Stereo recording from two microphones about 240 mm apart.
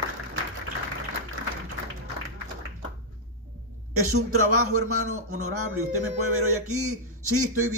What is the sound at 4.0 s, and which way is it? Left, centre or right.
A man's voice, right.